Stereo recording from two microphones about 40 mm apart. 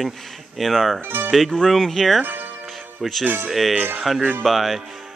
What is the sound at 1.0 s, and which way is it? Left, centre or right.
Speech, right.